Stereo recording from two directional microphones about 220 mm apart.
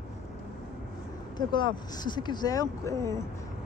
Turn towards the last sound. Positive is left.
turn(degrees=15)  # may be behind; listen again after turning